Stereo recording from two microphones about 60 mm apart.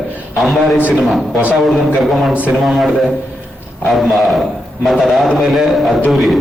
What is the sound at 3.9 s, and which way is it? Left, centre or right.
A man's voice, centre.